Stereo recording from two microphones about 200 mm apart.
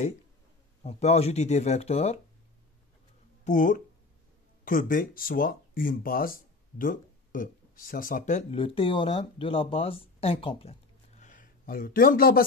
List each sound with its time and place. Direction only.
0.8 s speech: 30° left (ahead or behind)
3.4 s speech: 40° left (ahead or behind)